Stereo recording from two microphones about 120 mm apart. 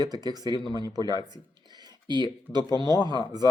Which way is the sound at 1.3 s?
35° right (ahead or behind).